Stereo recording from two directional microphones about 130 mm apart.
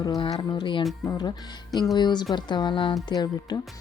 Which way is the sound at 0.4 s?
35° left (ahead or behind).